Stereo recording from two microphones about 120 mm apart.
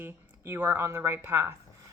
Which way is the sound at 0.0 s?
20° right (ahead or behind).